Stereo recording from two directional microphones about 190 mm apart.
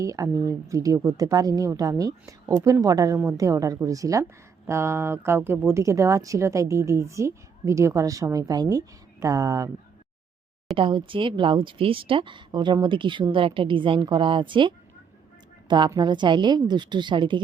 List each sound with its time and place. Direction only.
0.0 s a woman's voice: 20° right (ahead or behind)
10.8 s speech: 25° right (ahead or behind)
15.7 s speech: 25° right (ahead or behind)